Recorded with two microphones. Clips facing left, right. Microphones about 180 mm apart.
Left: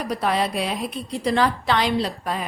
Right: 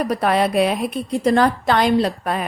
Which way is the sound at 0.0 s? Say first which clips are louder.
Right 5 dB; 55° right (ahead or behind).